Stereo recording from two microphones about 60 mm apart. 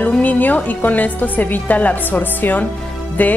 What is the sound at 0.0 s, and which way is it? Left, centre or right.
A woman's voice, left.